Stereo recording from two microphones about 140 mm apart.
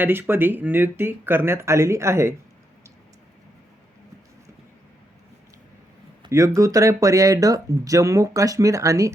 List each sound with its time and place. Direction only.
0.0 s speech: 15° right (ahead or behind)
6.2 s speech: 20° right (ahead or behind)